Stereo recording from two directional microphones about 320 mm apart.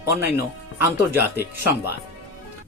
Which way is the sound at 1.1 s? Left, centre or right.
Centre.